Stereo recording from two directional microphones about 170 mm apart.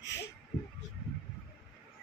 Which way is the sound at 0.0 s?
90° left.